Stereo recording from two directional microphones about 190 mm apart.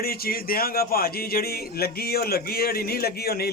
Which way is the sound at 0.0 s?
50° left (ahead or behind).